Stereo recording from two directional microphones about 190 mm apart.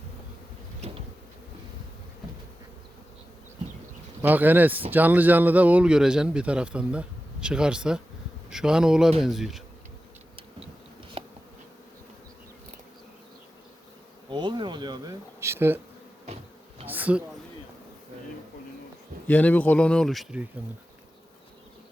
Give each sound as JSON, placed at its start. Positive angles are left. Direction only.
{"t": 4.2, "sound": "speech", "side_deg": -10}
{"t": 11.2, "sound": "bee", "side_deg": -30}
{"t": 14.3, "sound": "bee", "side_deg": -25}
{"t": 16.2, "sound": "insect", "side_deg": -35}
{"t": 16.8, "sound": "a sound", "side_deg": -10}
{"t": 19.3, "sound": "speech", "side_deg": 10}